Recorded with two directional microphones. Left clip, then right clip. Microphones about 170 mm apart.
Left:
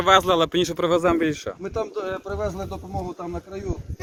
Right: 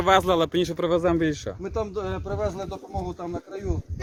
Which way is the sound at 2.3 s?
25° left (ahead or behind).